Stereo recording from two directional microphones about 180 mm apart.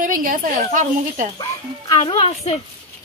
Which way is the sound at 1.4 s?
30° left (ahead or behind).